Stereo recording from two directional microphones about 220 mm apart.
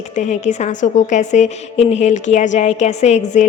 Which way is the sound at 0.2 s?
30° left (ahead or behind).